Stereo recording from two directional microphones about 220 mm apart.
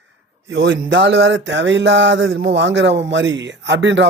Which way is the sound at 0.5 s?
55° right (ahead or behind).